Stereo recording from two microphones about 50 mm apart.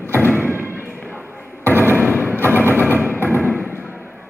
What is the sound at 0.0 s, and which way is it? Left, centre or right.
Thump, left.